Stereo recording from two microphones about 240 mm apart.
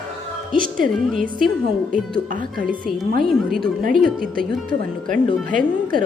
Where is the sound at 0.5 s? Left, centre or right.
Right.